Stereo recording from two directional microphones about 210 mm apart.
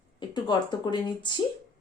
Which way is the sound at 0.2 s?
20° left (ahead or behind).